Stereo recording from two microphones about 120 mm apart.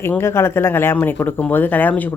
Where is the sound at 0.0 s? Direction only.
20° left (ahead or behind).